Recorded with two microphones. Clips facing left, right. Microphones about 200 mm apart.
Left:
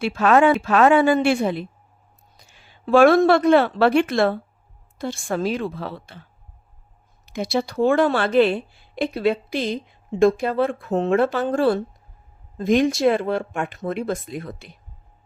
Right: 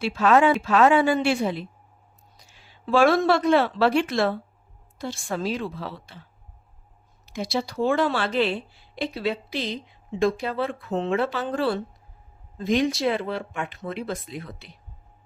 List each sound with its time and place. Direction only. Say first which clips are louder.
0.0 s a woman's voice: left 3 dB; 55° left (ahead or behind)
7.3 s a woman's voice: left 4 dB; 55° left (ahead or behind)